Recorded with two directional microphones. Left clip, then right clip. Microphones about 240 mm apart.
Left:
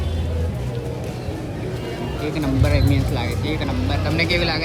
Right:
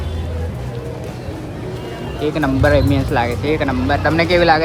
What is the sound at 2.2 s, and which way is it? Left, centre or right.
Speech, right.